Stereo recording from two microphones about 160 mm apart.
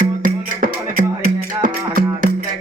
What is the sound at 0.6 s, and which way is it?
Music, 60° right (ahead or behind).